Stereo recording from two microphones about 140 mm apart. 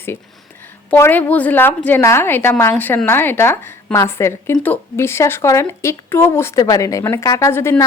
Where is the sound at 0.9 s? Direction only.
15° left (ahead or behind).